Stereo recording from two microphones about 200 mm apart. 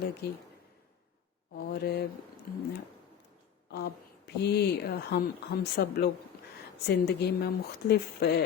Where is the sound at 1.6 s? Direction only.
50° left (ahead or behind).